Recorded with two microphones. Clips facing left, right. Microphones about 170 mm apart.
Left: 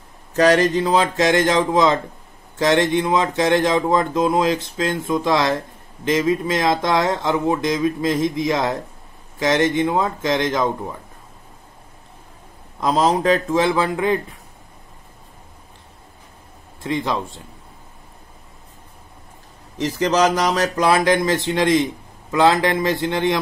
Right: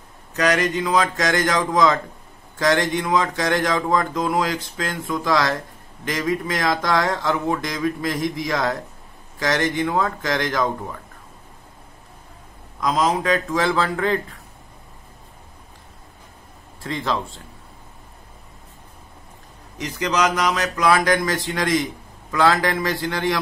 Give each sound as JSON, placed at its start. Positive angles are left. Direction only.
{"t": 0.4, "sound": "speech", "side_deg": 30}
{"t": 12.8, "sound": "speech", "side_deg": 30}
{"t": 16.8, "sound": "speech", "side_deg": 20}
{"t": 19.8, "sound": "speech", "side_deg": 30}